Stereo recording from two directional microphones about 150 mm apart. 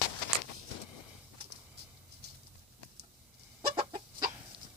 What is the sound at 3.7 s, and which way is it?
Chicken, 40° right (ahead or behind).